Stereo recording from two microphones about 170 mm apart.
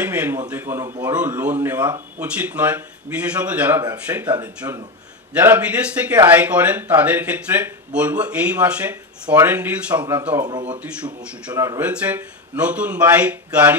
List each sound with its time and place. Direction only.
0.0 s a man's voice: 10° right (ahead or behind)
11.8 s speech: 10° right (ahead or behind)